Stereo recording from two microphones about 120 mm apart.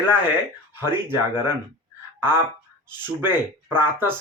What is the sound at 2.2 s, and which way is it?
Speech, 20° right (ahead or behind).